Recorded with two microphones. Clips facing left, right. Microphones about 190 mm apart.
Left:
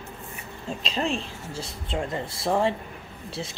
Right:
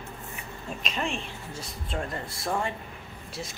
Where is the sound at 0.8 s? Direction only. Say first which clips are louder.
Left 4 dB; 30° left (ahead or behind).